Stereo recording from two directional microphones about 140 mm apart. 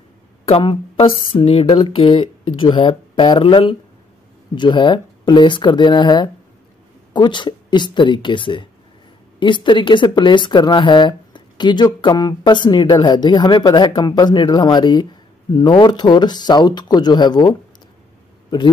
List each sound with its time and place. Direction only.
0.5 s speech: 40° left (ahead or behind)